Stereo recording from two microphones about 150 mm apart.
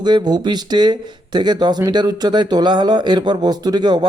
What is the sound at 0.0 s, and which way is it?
Speech, 30° right (ahead or behind).